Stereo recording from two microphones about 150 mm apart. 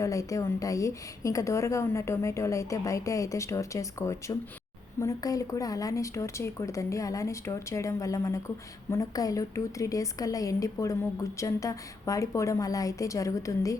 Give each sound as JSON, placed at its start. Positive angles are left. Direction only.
{"t": 0.0, "sound": "a woman's voice", "side_deg": 20}